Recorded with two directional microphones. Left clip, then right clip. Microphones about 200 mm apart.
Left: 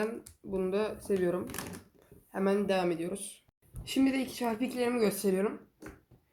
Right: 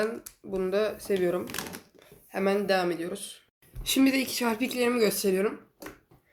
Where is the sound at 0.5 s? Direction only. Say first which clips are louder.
Right 4 dB; centre (ahead or behind).